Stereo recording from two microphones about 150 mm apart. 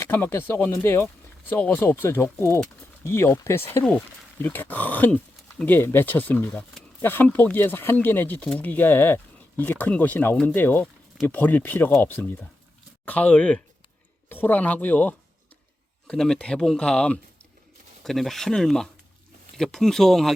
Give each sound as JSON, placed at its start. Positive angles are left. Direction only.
{"t": 0.0, "sound": "speech", "side_deg": 15}